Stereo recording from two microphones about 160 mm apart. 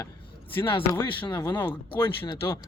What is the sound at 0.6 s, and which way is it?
Speech, 30° left (ahead or behind).